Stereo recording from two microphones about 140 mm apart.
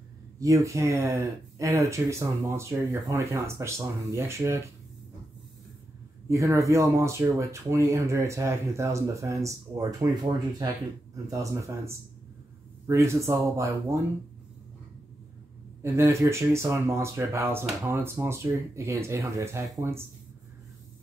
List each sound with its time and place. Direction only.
0.4 s speech: 20° right (ahead or behind)
6.2 s speech: 20° right (ahead or behind)
11.2 s speech: 25° right (ahead or behind)
15.8 s speech: 20° right (ahead or behind)